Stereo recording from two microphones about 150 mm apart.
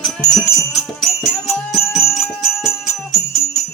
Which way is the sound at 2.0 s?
15° left (ahead or behind).